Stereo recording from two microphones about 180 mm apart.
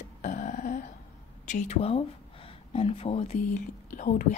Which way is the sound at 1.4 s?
40° left (ahead or behind).